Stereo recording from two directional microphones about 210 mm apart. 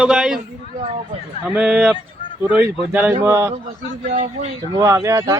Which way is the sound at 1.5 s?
5° right (ahead or behind).